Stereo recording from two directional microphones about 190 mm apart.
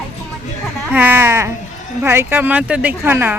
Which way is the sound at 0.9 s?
10° right (ahead or behind).